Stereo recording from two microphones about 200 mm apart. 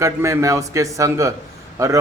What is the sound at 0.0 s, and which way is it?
A man's voice, 15° right (ahead or behind).